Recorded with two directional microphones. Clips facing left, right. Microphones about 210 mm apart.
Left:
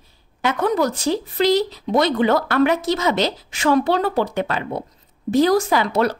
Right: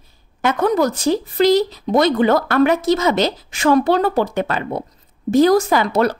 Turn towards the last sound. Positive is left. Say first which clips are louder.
# right 2 dB
turn(degrees=-45)  # may be behind; listen again after turning